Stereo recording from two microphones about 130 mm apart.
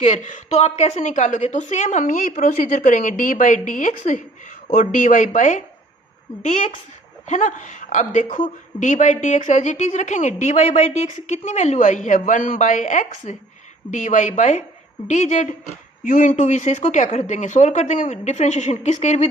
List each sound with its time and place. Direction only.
0.0 s a woman's voice: 70° left (ahead or behind)
4.7 s a woman's voice: 90° left
7.3 s a woman's voice: 70° left (ahead or behind)
16.0 s speech: 90° left; by 19.3 s 60° left (ahead or behind)